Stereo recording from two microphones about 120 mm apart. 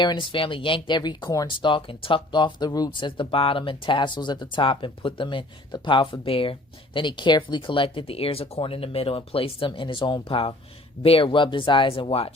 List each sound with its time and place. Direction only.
0.0 s speech: 40° left (ahead or behind)
3.1 s speech: 50° left (ahead or behind)